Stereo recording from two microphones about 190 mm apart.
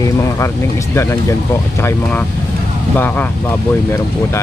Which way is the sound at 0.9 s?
15° left (ahead or behind).